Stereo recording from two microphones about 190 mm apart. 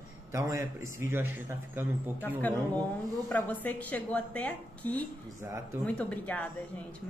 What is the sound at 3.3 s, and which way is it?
A woman's voice, 10° left (ahead or behind).